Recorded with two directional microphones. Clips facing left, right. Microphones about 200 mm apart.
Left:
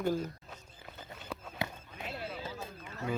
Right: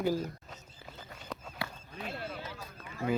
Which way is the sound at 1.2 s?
5° left (ahead or behind).